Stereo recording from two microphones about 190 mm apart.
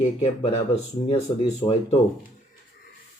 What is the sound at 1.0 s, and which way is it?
Speech, 30° left (ahead or behind).